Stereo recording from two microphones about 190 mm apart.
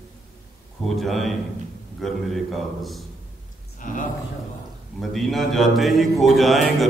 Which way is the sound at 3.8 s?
45° left (ahead or behind).